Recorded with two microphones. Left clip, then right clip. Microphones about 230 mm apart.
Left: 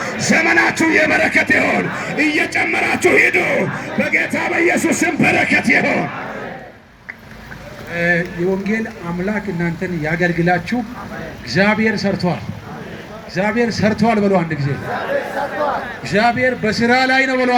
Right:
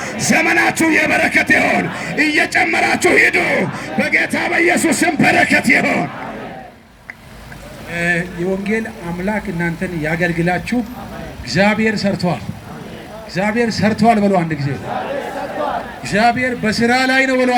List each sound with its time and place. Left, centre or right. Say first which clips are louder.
0.0 s music: even; right
7.9 s a man's voice: left 1 dB; right
16.0 s a man's voice: even; right